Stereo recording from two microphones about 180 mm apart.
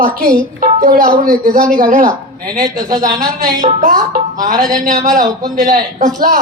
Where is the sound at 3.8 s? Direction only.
50° right (ahead or behind).